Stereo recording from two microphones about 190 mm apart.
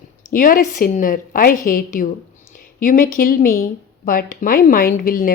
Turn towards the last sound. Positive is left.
turn(degrees=50)  # may be behind; listen again after turning